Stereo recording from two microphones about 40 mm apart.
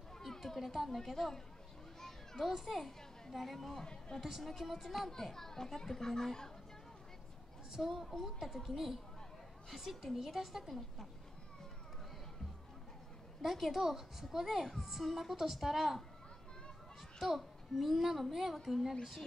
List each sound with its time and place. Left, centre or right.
0.3 s a sound: centre
0.6 s a child's voice: centre
2.0 s children playing: centre
3.3 s a child's voice: centre
3.8 s speech: left
4.2 s a woman's voice: centre
5.1 s a child's voice: centre
7.8 s a woman's voice: centre
13.4 s a child's voice: centre
17.2 s a child's voice: centre